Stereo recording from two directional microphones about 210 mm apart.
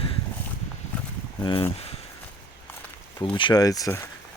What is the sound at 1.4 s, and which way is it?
Speech, 20° left (ahead or behind).